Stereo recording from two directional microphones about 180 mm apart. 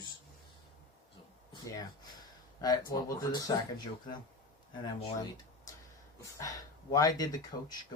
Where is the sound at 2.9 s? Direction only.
20° left (ahead or behind).